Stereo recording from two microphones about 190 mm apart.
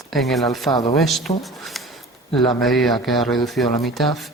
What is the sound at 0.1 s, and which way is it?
Speech, centre (ahead or behind).